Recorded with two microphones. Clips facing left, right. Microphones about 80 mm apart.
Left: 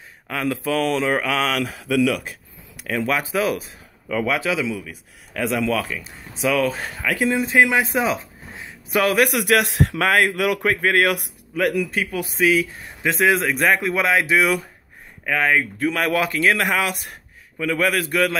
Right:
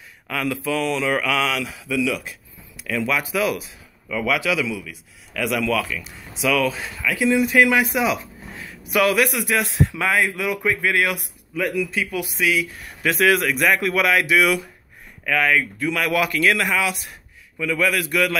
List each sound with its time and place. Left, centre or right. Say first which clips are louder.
0.3 s a man's voice: left 1 dB; left
2.8 s a man's voice: left 1 dB; left
9.2 s a man's voice: left 3 dB; left